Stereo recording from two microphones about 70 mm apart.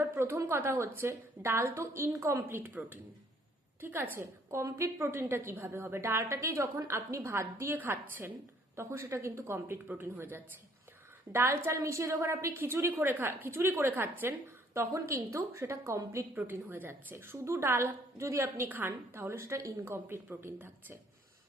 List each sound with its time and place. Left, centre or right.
0.2 s a woman's voice: right
4.5 s a woman's voice: right
16.3 s a woman's voice: right
19.8 s a woman's voice: right